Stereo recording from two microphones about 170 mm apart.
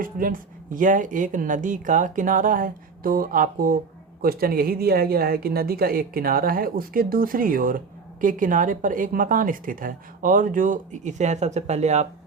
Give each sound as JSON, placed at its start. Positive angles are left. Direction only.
{"t": 0.0, "sound": "a woman's voice", "side_deg": -55}